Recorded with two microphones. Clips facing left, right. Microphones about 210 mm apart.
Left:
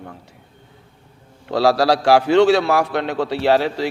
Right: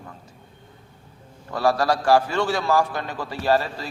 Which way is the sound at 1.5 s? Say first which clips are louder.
Left 5 dB; 80° left.